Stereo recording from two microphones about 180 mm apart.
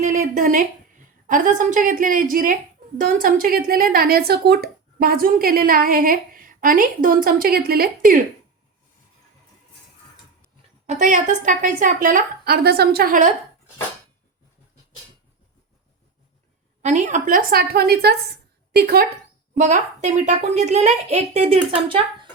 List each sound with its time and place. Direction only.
0.0 s a woman's voice: 45° right (ahead or behind)
10.8 s speech: 40° right (ahead or behind)
16.8 s a woman's voice: 40° right (ahead or behind); by 19.0 s 60° right (ahead or behind)
19.5 s a child's voice: 40° right (ahead or behind)